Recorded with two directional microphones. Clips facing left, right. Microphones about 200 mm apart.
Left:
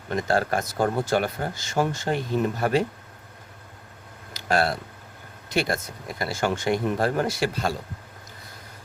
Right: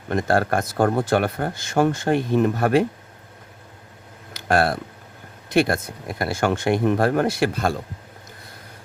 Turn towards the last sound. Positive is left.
turn(degrees=-55)  # may be behind; listen again after turning